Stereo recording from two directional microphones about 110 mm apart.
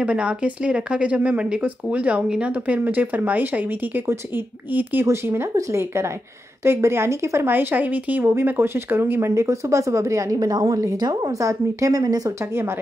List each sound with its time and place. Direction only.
0.0 s speech: 10° right (ahead or behind); by 12.4 s 35° right (ahead or behind)